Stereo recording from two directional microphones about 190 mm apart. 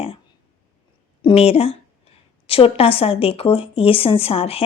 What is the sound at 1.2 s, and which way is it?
A woman's voice, 30° left (ahead or behind).